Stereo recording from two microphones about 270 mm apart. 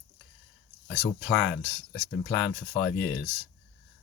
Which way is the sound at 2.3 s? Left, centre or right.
Centre.